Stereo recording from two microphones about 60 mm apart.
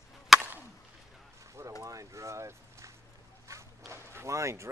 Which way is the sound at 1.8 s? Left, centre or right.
Right.